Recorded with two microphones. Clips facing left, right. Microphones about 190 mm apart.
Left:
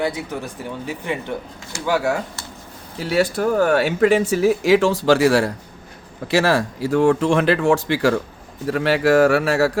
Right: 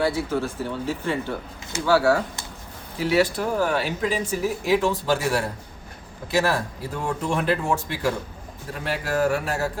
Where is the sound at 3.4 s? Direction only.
60° left (ahead or behind).